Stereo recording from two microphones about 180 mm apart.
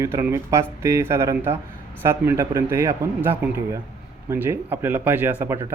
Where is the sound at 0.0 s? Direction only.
15° right (ahead or behind).